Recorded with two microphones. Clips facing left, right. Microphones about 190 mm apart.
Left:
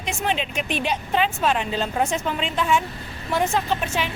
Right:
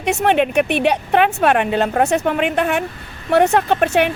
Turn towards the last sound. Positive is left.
turn(degrees=-65)  # may be behind; listen again after turning